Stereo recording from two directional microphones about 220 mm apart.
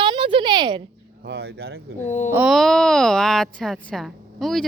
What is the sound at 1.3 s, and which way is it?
Speech, 50° right (ahead or behind).